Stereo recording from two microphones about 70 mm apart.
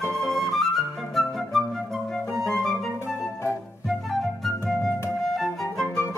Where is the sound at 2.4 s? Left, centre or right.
Centre.